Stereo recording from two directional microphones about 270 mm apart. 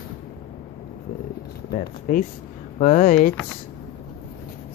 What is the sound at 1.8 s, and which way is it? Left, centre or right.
Speech, left.